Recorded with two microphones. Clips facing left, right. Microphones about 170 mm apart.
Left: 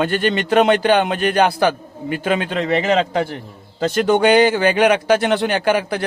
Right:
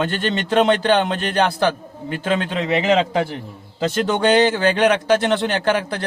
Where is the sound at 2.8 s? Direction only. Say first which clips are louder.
Right 2 dB; 45° left (ahead or behind).